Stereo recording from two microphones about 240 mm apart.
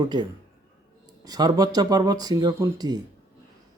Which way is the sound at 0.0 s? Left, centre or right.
Centre.